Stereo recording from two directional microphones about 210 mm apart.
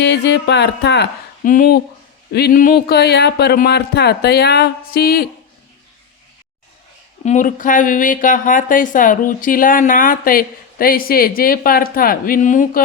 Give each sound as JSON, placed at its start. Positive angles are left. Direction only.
{"t": 0.0, "sound": "speech", "side_deg": 55}
{"t": 1.5, "sound": "speech", "side_deg": 40}
{"t": 7.3, "sound": "speech", "side_deg": 40}